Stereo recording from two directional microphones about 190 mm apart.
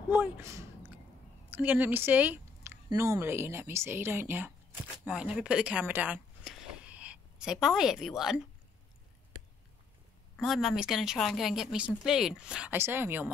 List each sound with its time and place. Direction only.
0.1 s a woman's voice: 10° right (ahead or behind)
10.3 s a woman's voice: centre (ahead or behind)